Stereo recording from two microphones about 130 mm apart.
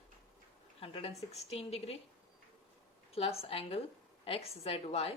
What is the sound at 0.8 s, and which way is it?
A woman's voice, 45° left (ahead or behind).